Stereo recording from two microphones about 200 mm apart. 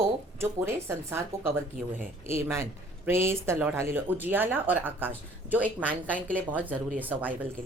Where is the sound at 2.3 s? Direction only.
15° right (ahead or behind).